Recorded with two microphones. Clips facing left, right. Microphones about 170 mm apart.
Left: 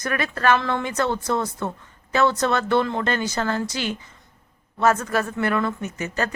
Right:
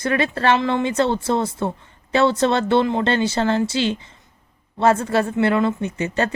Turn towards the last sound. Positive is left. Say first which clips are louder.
# right 5 dB
turn(degrees=-25)  # may be behind; listen again after turning